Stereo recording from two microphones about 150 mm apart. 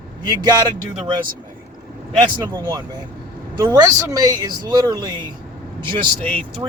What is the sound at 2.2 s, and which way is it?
Speech, 30° right (ahead or behind).